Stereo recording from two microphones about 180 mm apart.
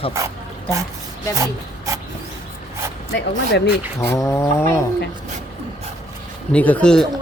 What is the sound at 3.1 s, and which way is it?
Speech, 75° left (ahead or behind).